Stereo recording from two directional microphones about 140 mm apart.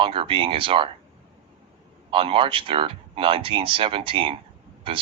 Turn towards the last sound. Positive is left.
turn(degrees=-40)  # may be behind; listen again after turning